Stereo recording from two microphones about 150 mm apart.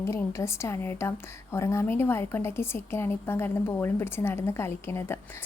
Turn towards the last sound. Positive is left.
turn(degrees=15)  # may be behind; listen again after turning